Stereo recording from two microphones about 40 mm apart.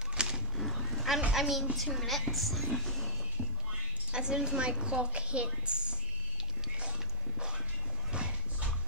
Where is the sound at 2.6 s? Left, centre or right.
Centre.